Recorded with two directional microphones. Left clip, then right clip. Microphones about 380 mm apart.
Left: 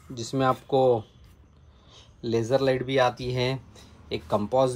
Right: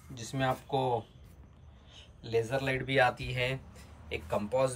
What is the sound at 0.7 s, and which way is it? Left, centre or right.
Speech, left.